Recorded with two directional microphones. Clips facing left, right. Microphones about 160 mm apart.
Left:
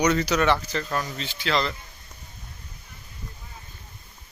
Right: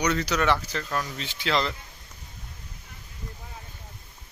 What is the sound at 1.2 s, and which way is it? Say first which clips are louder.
Speech: even; 15° right (ahead or behind).